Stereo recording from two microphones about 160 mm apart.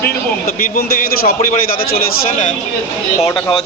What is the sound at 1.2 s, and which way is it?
Speech, 65° left (ahead or behind).